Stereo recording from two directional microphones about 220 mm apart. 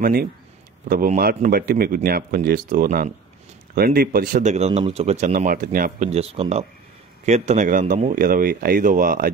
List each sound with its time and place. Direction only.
0.0 s speech: 45° right (ahead or behind)